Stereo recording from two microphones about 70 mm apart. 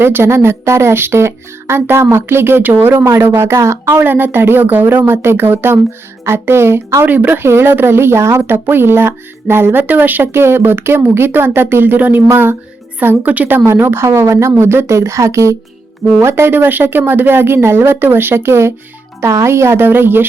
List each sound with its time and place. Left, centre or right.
0.0 s a woman's voice: right
13.7 s speech: right